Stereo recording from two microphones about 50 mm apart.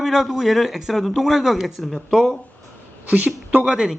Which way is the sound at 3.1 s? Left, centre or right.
Right.